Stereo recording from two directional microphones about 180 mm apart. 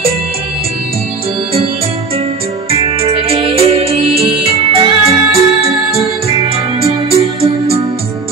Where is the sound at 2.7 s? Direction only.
30° right (ahead or behind).